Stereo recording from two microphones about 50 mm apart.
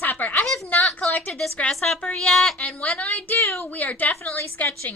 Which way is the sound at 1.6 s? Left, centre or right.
Left.